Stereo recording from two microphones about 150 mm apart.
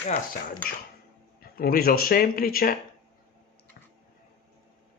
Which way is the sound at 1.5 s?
85° left.